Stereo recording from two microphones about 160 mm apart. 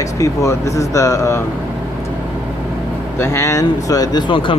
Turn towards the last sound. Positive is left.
turn(degrees=30)  # may be behind; listen again after turning